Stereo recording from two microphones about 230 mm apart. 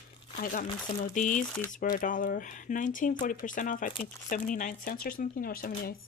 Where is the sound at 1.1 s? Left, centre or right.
Left.